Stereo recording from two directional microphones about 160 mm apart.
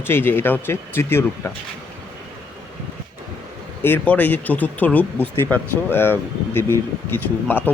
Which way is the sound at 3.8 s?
10° left (ahead or behind).